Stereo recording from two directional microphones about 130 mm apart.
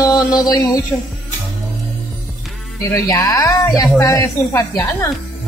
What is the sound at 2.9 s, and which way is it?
Speech, 25° left (ahead or behind).